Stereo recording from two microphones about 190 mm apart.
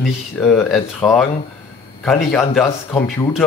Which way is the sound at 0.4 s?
5° left (ahead or behind).